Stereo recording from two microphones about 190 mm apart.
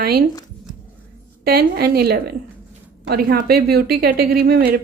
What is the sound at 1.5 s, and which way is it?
A woman's voice, 55° right (ahead or behind).